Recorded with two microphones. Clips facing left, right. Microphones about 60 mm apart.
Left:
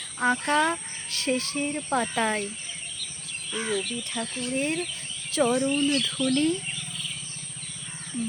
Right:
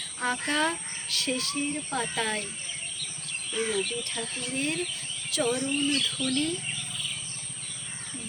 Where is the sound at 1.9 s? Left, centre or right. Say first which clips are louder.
Left 6 dB; left.